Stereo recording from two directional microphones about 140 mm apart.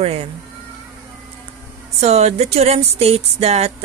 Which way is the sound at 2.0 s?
50° right (ahead or behind).